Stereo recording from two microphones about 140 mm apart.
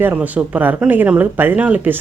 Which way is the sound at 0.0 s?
10° right (ahead or behind).